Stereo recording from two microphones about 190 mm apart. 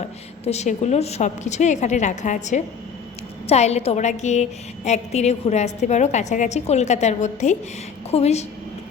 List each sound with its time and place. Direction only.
0.4 s a woman's voice: 35° left (ahead or behind)